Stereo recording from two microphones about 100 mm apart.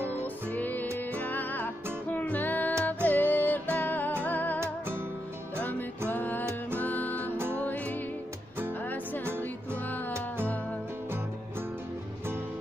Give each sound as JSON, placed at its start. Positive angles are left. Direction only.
{"t": 0.2, "sound": "music", "side_deg": 15}
{"t": 5.6, "sound": "music", "side_deg": 15}
{"t": 10.1, "sound": "music", "side_deg": -25}